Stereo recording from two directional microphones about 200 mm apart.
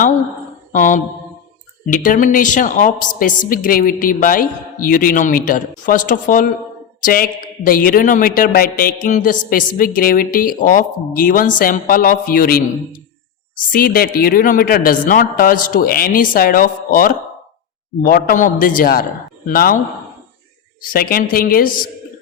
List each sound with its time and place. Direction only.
0.7 s mantra: 40° left (ahead or behind)
1.9 s a woman's voice: 40° left (ahead or behind)
13.7 s a woman's voice: 45° left (ahead or behind)
20.9 s a woman's voice: 45° left (ahead or behind)